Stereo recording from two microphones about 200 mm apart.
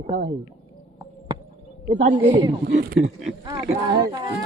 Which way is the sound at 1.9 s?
40° right (ahead or behind).